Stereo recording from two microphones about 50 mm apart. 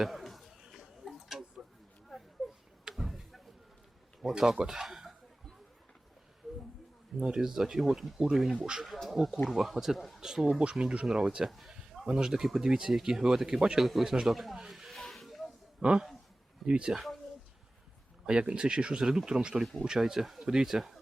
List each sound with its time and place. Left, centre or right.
0.0 s chatter: centre
0.8 s tick-tock: centre
2.1 s a sound: centre
4.4 s speech: centre
7.2 s speech: centre
11.4 s a sound: centre
12.0 s speech: centre
13.7 s speech: centre
15.1 s snake: centre
15.8 s speech: right
16.9 s speech: centre
18.3 s speech: centre